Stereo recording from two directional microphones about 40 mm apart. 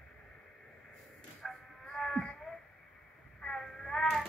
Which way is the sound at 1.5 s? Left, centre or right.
Centre.